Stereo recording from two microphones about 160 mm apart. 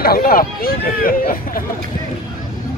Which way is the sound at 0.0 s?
65° left (ahead or behind).